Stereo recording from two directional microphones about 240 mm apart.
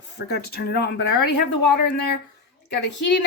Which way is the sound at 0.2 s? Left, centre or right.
Left.